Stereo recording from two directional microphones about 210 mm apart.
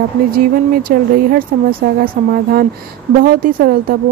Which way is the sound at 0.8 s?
45° right (ahead or behind).